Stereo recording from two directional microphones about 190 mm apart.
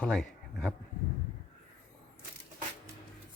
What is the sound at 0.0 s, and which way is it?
Speech, 5° left (ahead or behind).